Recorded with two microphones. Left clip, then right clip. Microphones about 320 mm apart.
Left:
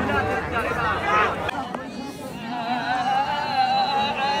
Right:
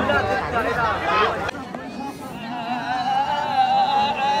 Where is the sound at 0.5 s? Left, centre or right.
Right.